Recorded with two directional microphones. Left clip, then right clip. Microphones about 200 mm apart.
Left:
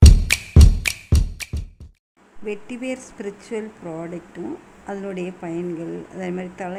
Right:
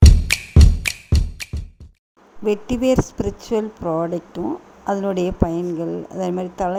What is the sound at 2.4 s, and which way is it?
Speech, 30° right (ahead or behind).